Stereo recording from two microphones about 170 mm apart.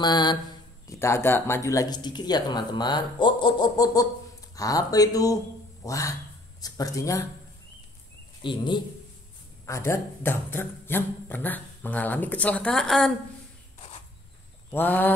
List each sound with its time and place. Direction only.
0.0 s mantra: 25° left (ahead or behind)
0.8 s speech: 15° left (ahead or behind)
8.4 s speech: 25° left (ahead or behind)
9.7 s speech: 15° left (ahead or behind)
13.7 s insect: 35° left (ahead or behind)
14.7 s speech: 10° left (ahead or behind)